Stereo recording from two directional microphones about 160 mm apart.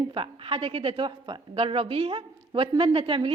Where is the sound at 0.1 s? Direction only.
35° right (ahead or behind).